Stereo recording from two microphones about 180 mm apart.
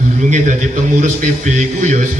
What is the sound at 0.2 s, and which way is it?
A man's voice, 40° right (ahead or behind).